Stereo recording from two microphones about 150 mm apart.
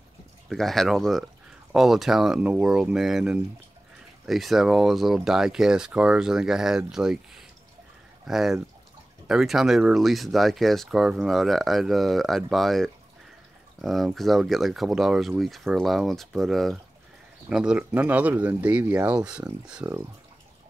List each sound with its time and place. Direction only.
0.5 s speech: centre (ahead or behind)